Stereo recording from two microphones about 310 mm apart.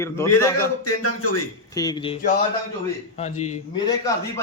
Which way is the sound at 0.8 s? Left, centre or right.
Left.